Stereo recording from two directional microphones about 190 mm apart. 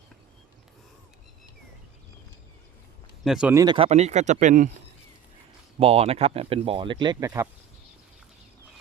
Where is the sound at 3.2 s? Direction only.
5° right (ahead or behind).